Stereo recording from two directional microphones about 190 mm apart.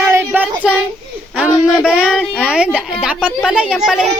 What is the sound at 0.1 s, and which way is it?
Child singing, 10° right (ahead or behind).